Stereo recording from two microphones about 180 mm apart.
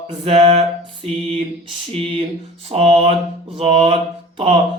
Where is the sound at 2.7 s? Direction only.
30° right (ahead or behind).